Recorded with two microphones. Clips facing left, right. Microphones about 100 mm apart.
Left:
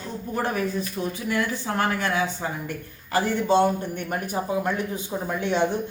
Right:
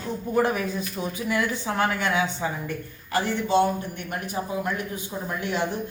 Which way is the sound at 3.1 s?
40° left (ahead or behind).